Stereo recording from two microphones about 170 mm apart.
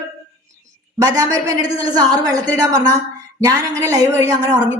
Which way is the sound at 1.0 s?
20° right (ahead or behind).